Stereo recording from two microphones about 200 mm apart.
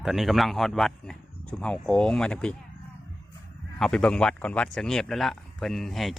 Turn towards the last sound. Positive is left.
turn(degrees=0)  # may be behind; listen again after turning